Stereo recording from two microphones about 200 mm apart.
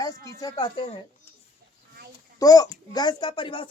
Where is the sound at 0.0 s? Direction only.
15° left (ahead or behind).